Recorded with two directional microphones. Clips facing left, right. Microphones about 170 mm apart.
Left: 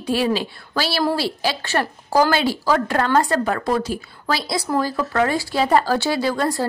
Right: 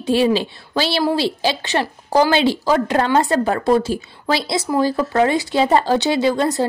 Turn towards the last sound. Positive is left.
turn(degrees=-20)  # may be behind; listen again after turning